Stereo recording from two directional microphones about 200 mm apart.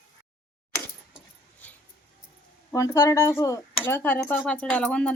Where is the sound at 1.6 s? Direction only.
5° left (ahead or behind).